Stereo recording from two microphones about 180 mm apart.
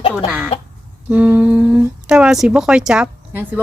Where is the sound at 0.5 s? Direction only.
35° left (ahead or behind).